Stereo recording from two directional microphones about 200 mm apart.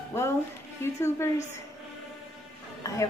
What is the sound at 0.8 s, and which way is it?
Speech, 15° left (ahead or behind).